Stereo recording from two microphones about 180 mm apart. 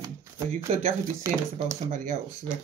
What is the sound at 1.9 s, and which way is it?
Speech, 45° right (ahead or behind).